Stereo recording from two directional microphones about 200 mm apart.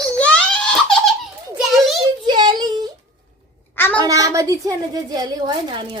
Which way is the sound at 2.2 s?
25° right (ahead or behind).